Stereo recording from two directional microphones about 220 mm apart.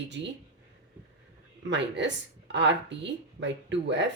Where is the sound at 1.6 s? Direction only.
55° right (ahead or behind).